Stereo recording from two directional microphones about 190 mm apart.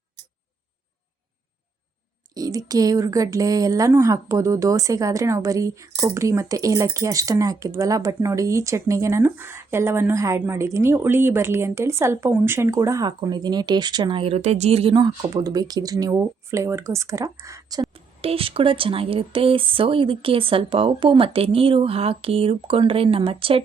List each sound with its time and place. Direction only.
2.3 s speech: 20° right (ahead or behind)
17.9 s speech: 30° right (ahead or behind)